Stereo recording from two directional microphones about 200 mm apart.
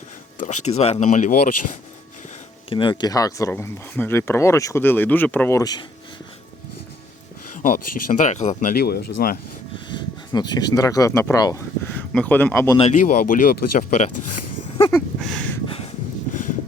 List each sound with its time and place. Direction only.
0.3 s speech: 35° left (ahead or behind)
2.6 s speech: 25° left (ahead or behind)
7.5 s speech: 45° left (ahead or behind)
8.7 s speech: 50° left (ahead or behind)
9.7 s speech: 20° left (ahead or behind)
12.7 s speech: 35° left (ahead or behind)
14.9 s a sound: centre (ahead or behind)
15.6 s a sound: 30° left (ahead or behind)
16.3 s clip-clop: 40° left (ahead or behind)